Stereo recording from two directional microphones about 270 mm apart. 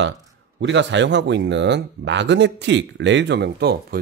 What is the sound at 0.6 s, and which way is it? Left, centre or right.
Speech, right.